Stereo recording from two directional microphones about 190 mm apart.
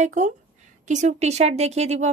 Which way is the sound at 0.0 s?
40° right (ahead or behind).